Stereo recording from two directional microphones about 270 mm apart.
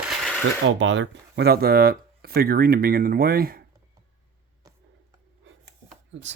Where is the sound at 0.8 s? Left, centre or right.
Right.